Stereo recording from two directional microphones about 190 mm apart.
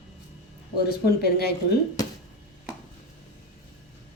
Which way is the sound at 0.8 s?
55° left (ahead or behind).